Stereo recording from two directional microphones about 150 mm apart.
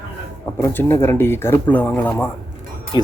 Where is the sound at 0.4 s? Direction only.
15° left (ahead or behind).